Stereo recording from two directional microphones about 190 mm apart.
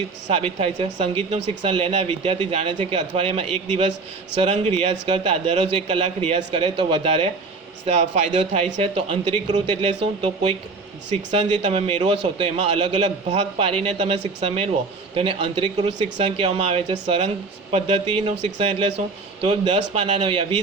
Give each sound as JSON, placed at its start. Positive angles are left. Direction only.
{"t": 0.3, "sound": "speech", "side_deg": -35}